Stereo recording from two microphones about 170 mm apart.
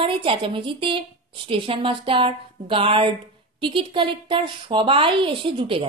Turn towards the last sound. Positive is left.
turn(degrees=-30)  # may be behind; listen again after turning